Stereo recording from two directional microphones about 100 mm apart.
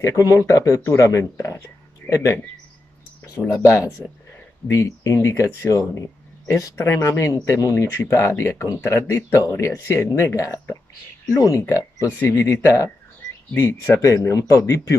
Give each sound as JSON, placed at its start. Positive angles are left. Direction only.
{"t": 0.0, "sound": "speech", "side_deg": 35}
{"t": 12.6, "sound": "speech", "side_deg": 30}
{"t": 13.5, "sound": "speech", "side_deg": 20}